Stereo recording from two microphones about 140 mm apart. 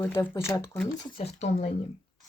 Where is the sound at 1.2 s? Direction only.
50° left (ahead or behind).